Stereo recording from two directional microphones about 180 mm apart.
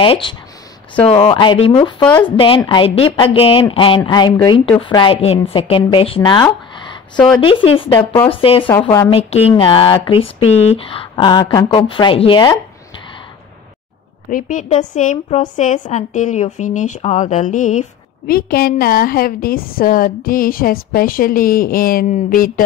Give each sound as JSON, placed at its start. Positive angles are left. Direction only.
{"t": 0.0, "sound": "a woman's voice", "side_deg": 30}
{"t": 14.3, "sound": "speech", "side_deg": 45}